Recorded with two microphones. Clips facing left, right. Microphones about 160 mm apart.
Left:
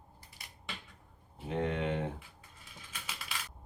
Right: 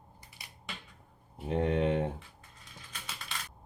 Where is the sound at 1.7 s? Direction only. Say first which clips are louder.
Right 7 dB; 35° right (ahead or behind).